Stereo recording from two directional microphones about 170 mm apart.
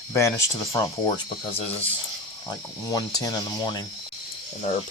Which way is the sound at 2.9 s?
20° left (ahead or behind).